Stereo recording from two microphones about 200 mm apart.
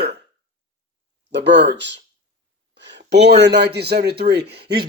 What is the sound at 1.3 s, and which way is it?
Speech, 60° right (ahead or behind).